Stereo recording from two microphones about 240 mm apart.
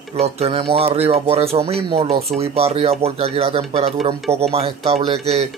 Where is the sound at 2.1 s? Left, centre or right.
Right.